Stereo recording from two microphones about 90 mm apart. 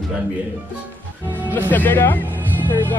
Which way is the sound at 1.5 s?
20° left (ahead or behind).